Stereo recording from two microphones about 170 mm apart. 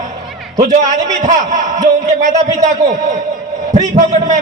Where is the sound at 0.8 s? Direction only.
45° right (ahead or behind).